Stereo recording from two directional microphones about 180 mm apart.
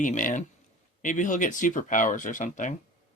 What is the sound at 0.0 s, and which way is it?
Speech, 45° left (ahead or behind).